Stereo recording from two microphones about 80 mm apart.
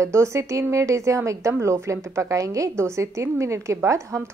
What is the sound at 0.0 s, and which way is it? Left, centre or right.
A woman's voice, right.